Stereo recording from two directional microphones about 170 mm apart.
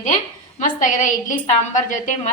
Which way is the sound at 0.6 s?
50° left (ahead or behind).